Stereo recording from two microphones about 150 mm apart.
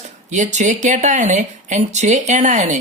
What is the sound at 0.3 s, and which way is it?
Speech, 55° right (ahead or behind).